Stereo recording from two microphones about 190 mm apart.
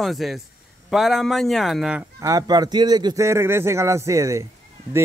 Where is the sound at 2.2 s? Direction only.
20° right (ahead or behind).